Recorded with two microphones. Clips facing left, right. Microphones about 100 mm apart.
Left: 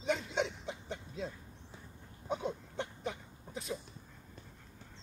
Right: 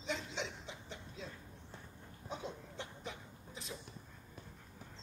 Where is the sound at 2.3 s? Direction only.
60° left (ahead or behind).